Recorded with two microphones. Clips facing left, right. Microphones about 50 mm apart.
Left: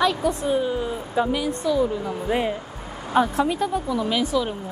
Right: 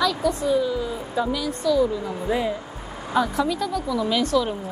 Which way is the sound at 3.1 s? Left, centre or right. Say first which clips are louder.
Left 2 dB; left.